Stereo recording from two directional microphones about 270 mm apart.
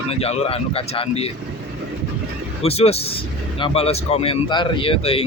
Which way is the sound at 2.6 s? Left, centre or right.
Left.